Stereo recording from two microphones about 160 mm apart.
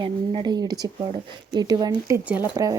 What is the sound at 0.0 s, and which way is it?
Speech, 30° right (ahead or behind).